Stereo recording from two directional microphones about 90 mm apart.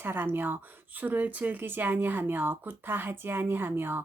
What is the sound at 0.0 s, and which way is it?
Speech, 25° right (ahead or behind).